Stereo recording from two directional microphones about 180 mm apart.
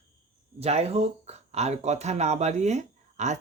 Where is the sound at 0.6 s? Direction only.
35° right (ahead or behind).